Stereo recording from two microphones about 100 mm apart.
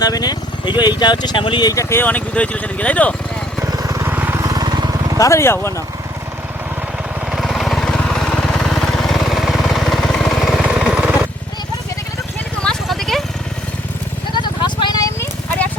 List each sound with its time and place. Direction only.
0.0 s speech: 40° left (ahead or behind)
1.7 s speech: 30° left (ahead or behind); by 3.2 s 15° left (ahead or behind)
3.7 s vehicle: 35° right (ahead or behind)
4.1 s vehicle: 20° right (ahead or behind)
4.4 s vehicle: 40° right (ahead or behind)
5.1 s speech: 30° left (ahead or behind)
7.3 s lawn mower: centre (ahead or behind)
12.6 s clip-clop: 5° left (ahead or behind)
14.3 s vehicle: 50° left (ahead or behind)